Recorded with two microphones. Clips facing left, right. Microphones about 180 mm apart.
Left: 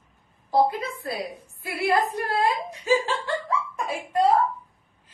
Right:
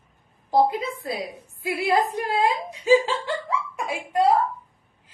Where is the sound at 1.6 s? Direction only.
15° right (ahead or behind).